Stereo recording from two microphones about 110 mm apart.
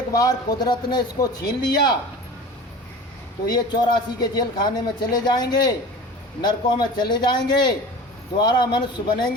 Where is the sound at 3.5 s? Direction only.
40° left (ahead or behind).